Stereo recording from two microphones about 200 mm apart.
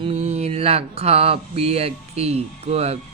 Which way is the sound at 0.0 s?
30° right (ahead or behind).